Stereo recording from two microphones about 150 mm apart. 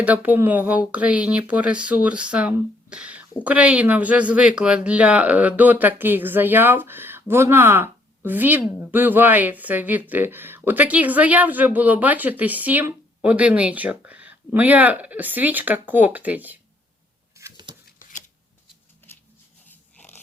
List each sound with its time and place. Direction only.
0.0 s speech: 10° right (ahead or behind)
17.3 s patter: 20° right (ahead or behind)
19.6 s dog: 10° left (ahead or behind)